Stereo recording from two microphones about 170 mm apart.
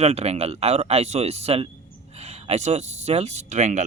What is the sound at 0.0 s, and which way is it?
Speech, 40° right (ahead or behind).